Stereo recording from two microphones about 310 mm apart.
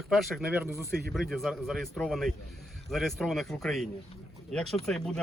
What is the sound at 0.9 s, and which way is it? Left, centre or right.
Speech, right.